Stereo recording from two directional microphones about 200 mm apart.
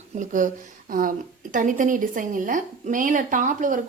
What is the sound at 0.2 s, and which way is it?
A woman's voice, 40° right (ahead or behind).